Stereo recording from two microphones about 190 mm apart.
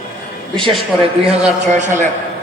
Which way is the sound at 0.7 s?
Centre (ahead or behind).